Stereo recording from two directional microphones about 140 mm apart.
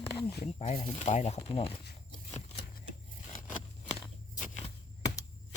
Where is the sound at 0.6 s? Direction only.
40° left (ahead or behind).